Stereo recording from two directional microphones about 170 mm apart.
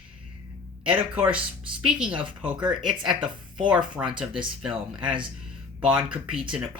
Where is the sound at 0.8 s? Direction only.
10° right (ahead or behind).